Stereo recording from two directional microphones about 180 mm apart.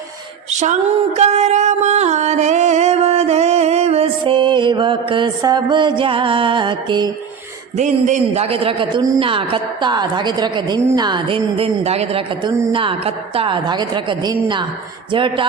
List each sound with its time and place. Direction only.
0.6 s music: 40° right (ahead or behind)
7.8 s a man's voice: 40° right (ahead or behind)